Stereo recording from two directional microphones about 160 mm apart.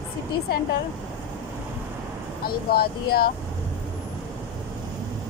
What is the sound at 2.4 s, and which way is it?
Speech, 75° left (ahead or behind).